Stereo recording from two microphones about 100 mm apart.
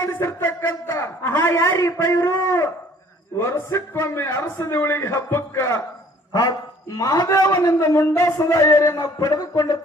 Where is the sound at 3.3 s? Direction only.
25° left (ahead or behind).